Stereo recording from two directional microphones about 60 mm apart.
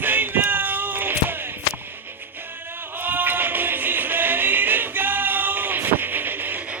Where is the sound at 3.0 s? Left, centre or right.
Right.